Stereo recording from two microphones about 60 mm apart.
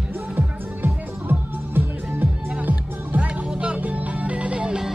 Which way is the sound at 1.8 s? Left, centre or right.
Right.